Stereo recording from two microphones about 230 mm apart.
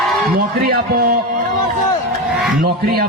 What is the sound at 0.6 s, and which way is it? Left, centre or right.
Speech, right.